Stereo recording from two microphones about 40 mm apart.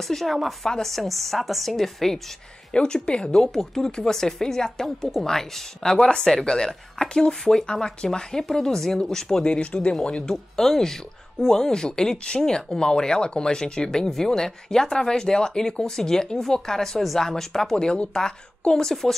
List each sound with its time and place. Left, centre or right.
0.1 s speech: centre
2.7 s speech: left
10.2 s speech: centre
17.7 s speech: left
18.8 s speech: centre